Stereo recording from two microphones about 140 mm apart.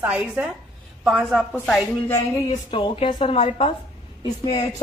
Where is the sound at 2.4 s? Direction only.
40° left (ahead or behind).